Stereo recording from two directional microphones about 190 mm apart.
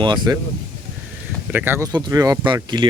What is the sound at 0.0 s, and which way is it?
Speech, 25° right (ahead or behind).